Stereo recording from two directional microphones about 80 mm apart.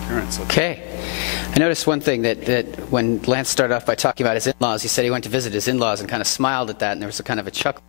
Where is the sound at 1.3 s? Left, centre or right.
Centre.